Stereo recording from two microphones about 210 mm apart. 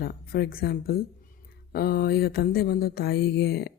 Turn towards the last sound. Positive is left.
turn(degrees=50)  # may be behind; listen again after turning